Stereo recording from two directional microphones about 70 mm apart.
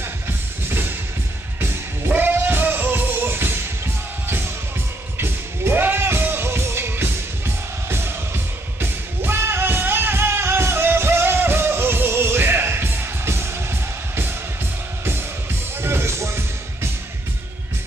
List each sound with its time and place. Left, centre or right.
0.7 s music: right
5.1 s music: right
15.8 s music: right